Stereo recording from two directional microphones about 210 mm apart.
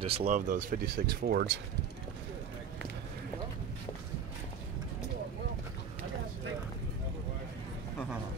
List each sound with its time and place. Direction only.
0.0 s speech: 30° right (ahead or behind)
0.5 s speech: 40° right (ahead or behind)